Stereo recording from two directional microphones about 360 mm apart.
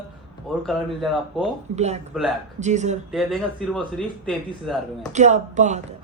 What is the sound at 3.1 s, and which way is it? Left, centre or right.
Speech, centre.